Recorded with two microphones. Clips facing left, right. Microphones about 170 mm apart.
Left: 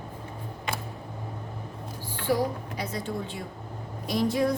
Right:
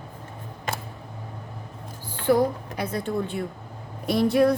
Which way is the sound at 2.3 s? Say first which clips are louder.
Right 6 dB; 60° right (ahead or behind).